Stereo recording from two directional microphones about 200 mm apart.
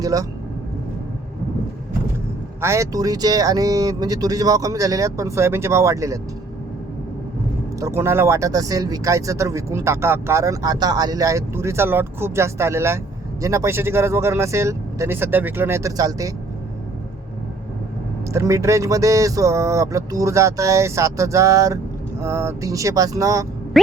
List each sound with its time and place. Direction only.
0.0 s speech: 15° right (ahead or behind)
2.6 s speech: 15° right (ahead or behind)
7.8 s speech: 15° right (ahead or behind)
18.3 s speech: 15° right (ahead or behind)
23.8 s a sound: centre (ahead or behind)